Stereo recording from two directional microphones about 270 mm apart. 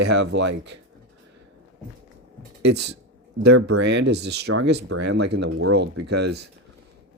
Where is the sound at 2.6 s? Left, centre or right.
Right.